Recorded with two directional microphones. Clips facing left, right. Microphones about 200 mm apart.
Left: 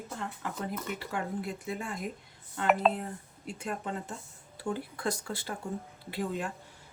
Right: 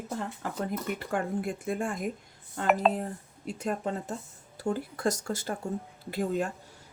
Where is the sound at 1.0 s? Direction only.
50° right (ahead or behind).